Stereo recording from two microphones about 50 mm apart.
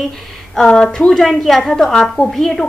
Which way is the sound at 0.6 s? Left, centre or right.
Centre.